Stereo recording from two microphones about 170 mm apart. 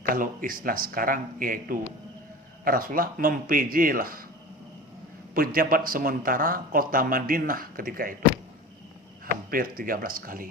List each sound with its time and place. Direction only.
0.1 s speech: 55° right (ahead or behind)
5.3 s speech: 60° right (ahead or behind)
9.2 s speech: 55° right (ahead or behind)